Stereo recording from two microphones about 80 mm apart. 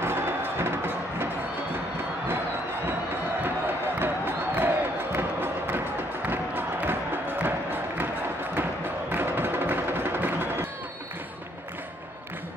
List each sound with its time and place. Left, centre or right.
0.0 s music: right
3.4 s a sound: right
6.2 s music: right
9.1 s music: right